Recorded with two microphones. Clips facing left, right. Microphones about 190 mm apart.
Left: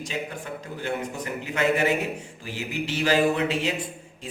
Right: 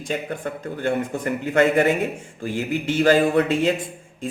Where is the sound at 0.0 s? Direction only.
55° right (ahead or behind).